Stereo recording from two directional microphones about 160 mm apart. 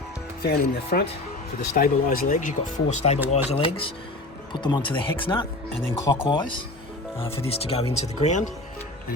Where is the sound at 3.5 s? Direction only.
35° left (ahead or behind).